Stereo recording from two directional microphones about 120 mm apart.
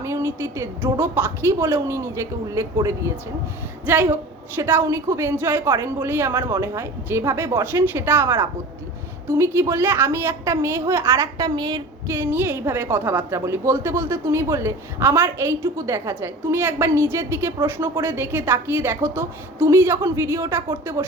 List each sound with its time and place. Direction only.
0.0 s a woman's voice: 25° right (ahead or behind)
12.0 s a woman's voice: 20° right (ahead or behind)